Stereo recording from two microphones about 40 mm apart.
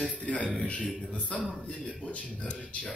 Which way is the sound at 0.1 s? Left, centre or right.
Left.